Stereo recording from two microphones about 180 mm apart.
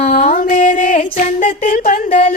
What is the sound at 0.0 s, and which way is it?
Music, 45° left (ahead or behind).